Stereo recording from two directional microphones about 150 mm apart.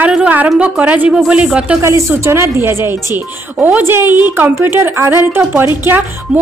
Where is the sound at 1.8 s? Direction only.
20° right (ahead or behind).